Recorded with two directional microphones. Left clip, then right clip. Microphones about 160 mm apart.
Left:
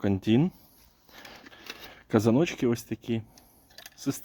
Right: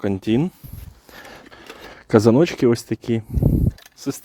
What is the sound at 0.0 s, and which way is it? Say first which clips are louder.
Speech: right 5 dB; 40° right (ahead or behind).